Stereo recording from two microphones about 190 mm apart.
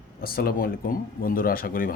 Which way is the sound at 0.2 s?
50° left (ahead or behind).